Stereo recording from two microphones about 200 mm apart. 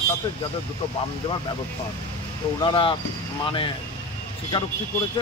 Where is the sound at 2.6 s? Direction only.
25° left (ahead or behind).